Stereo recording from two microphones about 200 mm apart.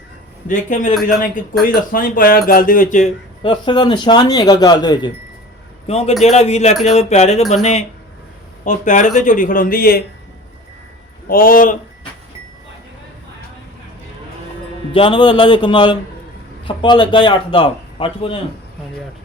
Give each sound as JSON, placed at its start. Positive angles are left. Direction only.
{"t": 0.4, "sound": "speech", "side_deg": 40}
{"t": 3.4, "sound": "speech", "side_deg": 25}
{"t": 11.3, "sound": "speech", "side_deg": 45}
{"t": 14.9, "sound": "speech", "side_deg": 25}